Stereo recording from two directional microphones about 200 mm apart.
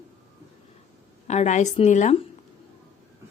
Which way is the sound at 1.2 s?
35° left (ahead or behind).